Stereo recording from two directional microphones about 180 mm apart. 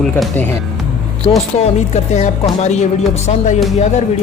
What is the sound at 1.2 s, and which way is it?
Music, 30° left (ahead or behind).